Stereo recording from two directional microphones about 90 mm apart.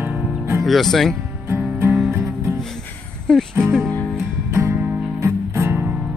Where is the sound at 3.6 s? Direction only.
Centre (ahead or behind).